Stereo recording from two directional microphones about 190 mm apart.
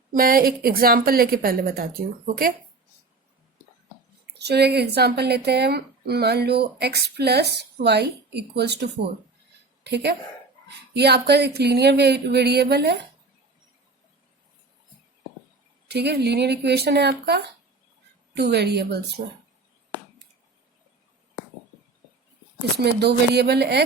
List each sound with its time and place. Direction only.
0.1 s a woman's voice: 50° right (ahead or behind)
4.4 s speech: 60° right (ahead or behind)
15.9 s speech: 60° right (ahead or behind)
22.8 s speech: 60° right (ahead or behind)